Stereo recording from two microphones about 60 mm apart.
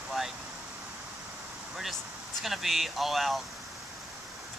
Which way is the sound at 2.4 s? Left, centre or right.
Centre.